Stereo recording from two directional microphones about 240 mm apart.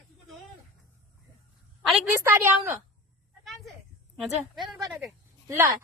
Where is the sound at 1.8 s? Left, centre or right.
Centre.